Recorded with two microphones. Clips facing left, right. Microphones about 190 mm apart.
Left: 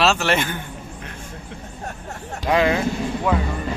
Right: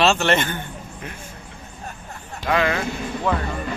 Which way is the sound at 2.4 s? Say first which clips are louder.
Left 3 dB; 15° left (ahead or behind).